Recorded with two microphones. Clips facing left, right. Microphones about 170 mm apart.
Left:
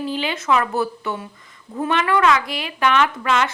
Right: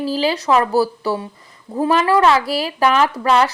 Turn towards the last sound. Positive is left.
turn(degrees=-35)  # may be behind; listen again after turning